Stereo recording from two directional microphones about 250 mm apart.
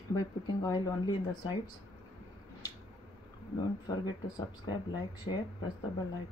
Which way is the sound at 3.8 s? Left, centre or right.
Centre.